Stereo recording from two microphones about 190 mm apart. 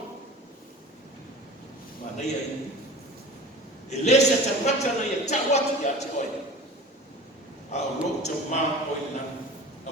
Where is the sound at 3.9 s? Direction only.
35° left (ahead or behind).